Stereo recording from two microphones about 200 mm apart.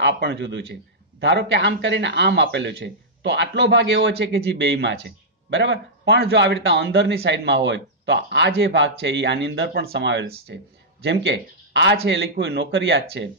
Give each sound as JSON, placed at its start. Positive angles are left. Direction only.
{"t": 0.0, "sound": "speech", "side_deg": -60}